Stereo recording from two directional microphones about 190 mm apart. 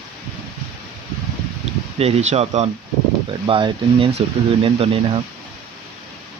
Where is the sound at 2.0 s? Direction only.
30° right (ahead or behind).